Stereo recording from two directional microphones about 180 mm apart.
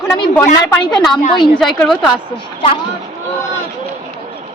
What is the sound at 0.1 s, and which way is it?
Speech, 15° left (ahead or behind).